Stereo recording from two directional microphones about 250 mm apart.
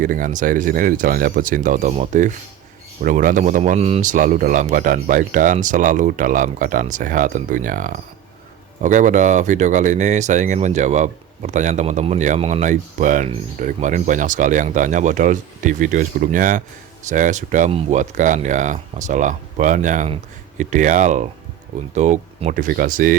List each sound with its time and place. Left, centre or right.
0.0 s speech: right